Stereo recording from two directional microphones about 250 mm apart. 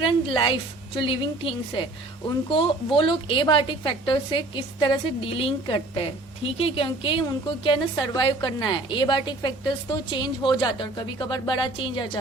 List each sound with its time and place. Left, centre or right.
0.0 s a woman's voice: centre